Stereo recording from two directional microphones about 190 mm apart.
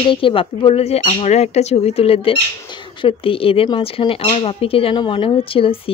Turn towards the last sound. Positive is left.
turn(degrees=30)  # may be behind; listen again after turning